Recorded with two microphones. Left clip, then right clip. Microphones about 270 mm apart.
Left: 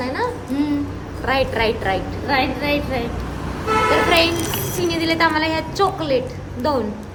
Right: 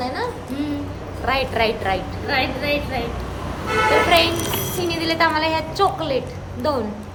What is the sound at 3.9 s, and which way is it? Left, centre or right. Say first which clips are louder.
A woman's voice: right 1 dB; centre.